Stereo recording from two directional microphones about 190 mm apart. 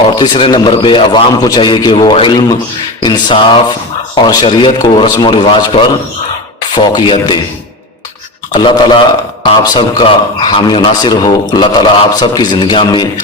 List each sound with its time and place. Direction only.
0.2 s a man's voice: 25° left (ahead or behind)
8.5 s a man's voice: 25° left (ahead or behind)